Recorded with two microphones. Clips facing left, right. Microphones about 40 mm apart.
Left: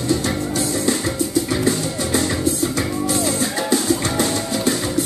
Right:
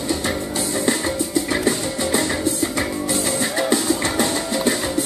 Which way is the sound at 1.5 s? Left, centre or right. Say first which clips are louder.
Left 1 dB; right.